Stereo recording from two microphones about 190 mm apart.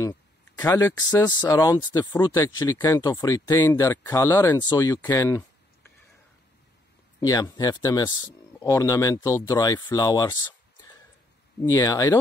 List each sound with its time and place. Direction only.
0.0 s speech: 15° left (ahead or behind)
7.2 s speech: 15° left (ahead or behind)
11.7 s speech: 20° left (ahead or behind)